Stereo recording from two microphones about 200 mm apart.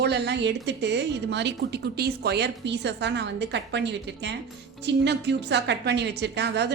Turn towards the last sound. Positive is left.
turn(degrees=-55)  # may be behind; listen again after turning